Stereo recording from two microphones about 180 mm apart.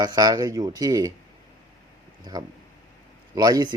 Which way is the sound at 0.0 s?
20° right (ahead or behind).